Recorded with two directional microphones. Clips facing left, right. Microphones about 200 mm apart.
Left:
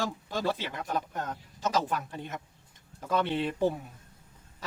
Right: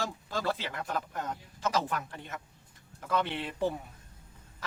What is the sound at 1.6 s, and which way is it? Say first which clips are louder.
Speech: left 2 dB; 20° left (ahead or behind).